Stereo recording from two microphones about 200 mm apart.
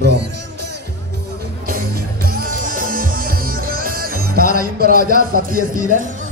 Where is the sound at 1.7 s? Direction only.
45° right (ahead or behind).